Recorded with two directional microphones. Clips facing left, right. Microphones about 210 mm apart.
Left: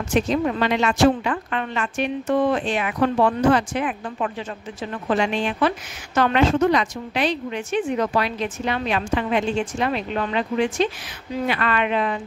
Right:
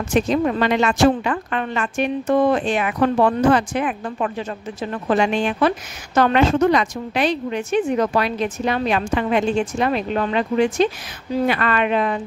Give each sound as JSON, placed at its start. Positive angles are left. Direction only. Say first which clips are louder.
{"t": 0.1, "sound": "a woman's voice", "louder": "right 2 dB", "side_deg": -50}